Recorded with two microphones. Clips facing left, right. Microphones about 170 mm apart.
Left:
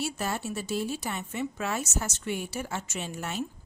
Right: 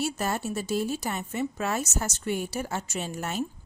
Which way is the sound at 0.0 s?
45° right (ahead or behind).